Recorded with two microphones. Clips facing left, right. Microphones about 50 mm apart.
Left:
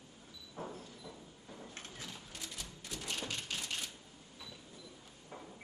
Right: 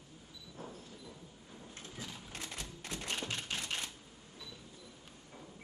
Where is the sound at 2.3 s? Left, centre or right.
Right.